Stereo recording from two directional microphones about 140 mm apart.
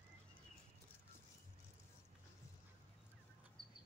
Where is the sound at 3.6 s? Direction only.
35° left (ahead or behind).